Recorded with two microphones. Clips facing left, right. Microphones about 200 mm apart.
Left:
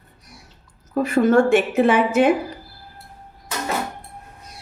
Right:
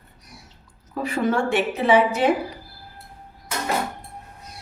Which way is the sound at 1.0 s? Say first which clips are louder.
Left 6 dB; 45° left (ahead or behind).